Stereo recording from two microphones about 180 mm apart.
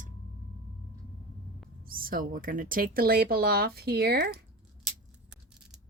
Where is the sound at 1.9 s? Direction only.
55° right (ahead or behind).